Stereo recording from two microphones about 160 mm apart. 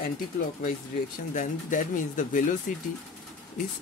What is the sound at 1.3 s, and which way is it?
Speech, 55° left (ahead or behind).